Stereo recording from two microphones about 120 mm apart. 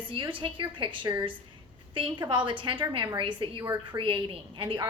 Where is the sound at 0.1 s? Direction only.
45° right (ahead or behind).